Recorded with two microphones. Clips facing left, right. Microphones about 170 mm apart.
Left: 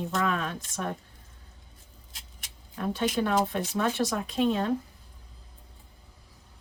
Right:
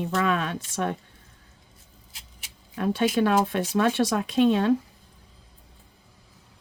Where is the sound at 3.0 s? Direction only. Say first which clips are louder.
Right 4 dB; 75° right (ahead or behind).